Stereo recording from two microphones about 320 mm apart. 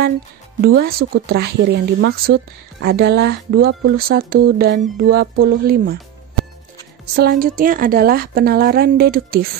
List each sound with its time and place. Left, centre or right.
0.6 s speech: right
7.2 s speech: right